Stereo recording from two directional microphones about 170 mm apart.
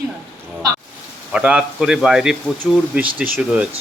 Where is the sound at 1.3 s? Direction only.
5° right (ahead or behind).